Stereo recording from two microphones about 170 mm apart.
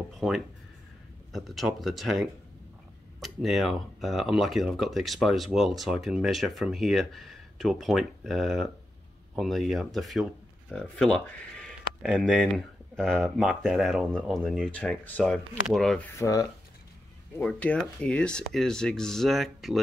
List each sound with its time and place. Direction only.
0.1 s a sound: centre (ahead or behind)
1.3 s speech: centre (ahead or behind)
16.2 s speech: 20° left (ahead or behind)
17.4 s speech: 10° left (ahead or behind)